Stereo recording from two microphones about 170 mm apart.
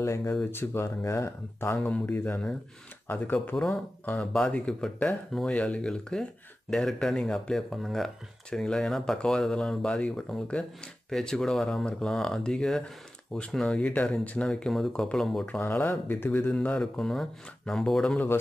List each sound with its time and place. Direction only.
0.0 s speech: 15° left (ahead or behind)